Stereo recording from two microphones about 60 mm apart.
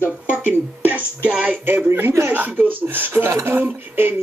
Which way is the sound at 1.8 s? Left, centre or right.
Right.